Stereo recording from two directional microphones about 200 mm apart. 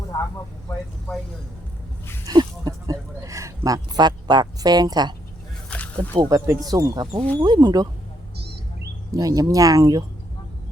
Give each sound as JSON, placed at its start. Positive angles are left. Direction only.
{"t": 2.2, "sound": "a sound", "side_deg": -20}
{"t": 5.7, "sound": "wild animals", "side_deg": 5}
{"t": 6.1, "sound": "speech", "side_deg": -20}
{"t": 9.1, "sound": "speech", "side_deg": -15}